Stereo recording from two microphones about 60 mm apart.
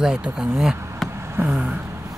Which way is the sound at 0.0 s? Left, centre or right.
Centre.